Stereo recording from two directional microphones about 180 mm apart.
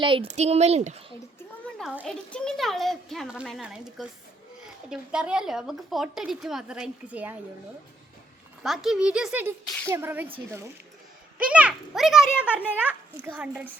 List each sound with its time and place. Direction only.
0.0 s speech: 30° right (ahead or behind)
1.8 s speech: 5° right (ahead or behind)
8.6 s speech: centre (ahead or behind)
11.4 s speech: 5° right (ahead or behind)